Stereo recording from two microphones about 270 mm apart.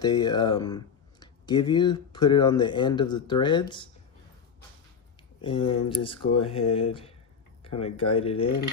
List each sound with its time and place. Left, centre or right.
0.0 s speech: centre
5.4 s speech: centre